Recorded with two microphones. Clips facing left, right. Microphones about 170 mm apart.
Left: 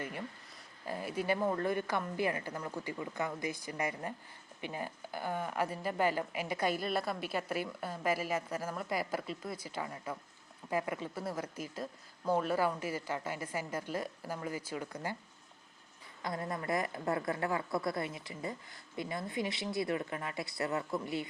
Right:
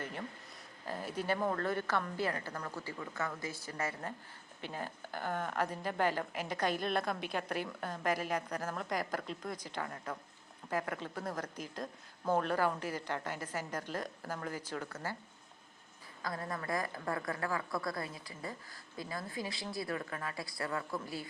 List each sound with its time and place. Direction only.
0.9 s a woman's voice: 10° left (ahead or behind)
16.2 s a woman's voice: 25° left (ahead or behind)